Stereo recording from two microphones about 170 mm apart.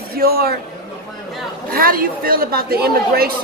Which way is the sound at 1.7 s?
60° right (ahead or behind).